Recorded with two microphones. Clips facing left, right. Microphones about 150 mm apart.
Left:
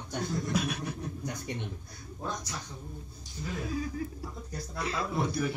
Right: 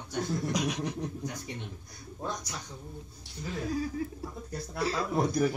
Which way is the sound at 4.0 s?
25° right (ahead or behind).